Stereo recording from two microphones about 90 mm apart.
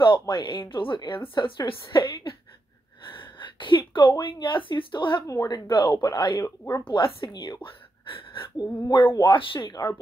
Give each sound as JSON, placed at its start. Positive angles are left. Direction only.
{"t": 0.0, "sound": "a woman's voice", "side_deg": 65}
{"t": 3.1, "sound": "a sound", "side_deg": 65}
{"t": 4.2, "sound": "a woman's voice", "side_deg": 65}
{"t": 5.2, "sound": "speech", "side_deg": 40}
{"t": 5.7, "sound": "a woman's voice", "side_deg": 55}
{"t": 6.8, "sound": "speech", "side_deg": 75}
{"t": 8.5, "sound": "speech", "side_deg": 50}
{"t": 9.2, "sound": "a woman's voice", "side_deg": 70}